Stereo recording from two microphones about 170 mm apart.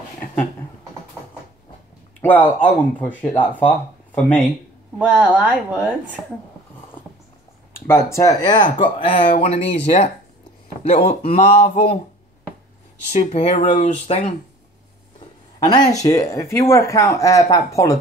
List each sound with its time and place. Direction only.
2.2 s speech: 10° left (ahead or behind)
5.3 s speech: 10° right (ahead or behind)
6.2 s speech: 5° left (ahead or behind)
7.8 s speech: 15° left (ahead or behind); by 12.0 s 40° left (ahead or behind)
13.1 s speech: 40° left (ahead or behind)
15.6 s speech: 25° left (ahead or behind)